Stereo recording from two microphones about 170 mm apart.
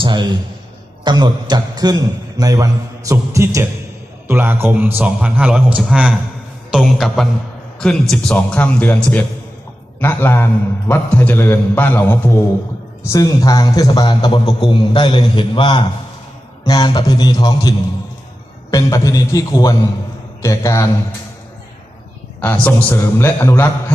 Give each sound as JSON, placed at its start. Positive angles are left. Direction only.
{"t": 0.0, "sound": "a man's voice", "side_deg": -25}
{"t": 22.4, "sound": "a man's voice", "side_deg": 10}